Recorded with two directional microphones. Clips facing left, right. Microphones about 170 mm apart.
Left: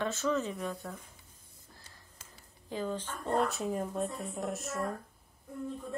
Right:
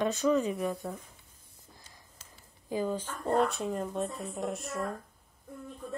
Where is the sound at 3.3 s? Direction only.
Centre (ahead or behind).